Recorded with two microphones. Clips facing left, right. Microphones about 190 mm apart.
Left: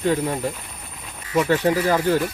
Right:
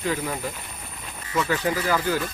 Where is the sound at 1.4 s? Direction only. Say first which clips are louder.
Left 6 dB; 30° left (ahead or behind).